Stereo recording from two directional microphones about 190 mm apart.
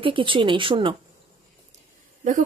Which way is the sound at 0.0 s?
25° right (ahead or behind).